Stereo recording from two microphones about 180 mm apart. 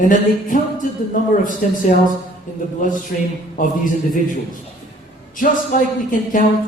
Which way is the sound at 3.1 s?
50° left (ahead or behind).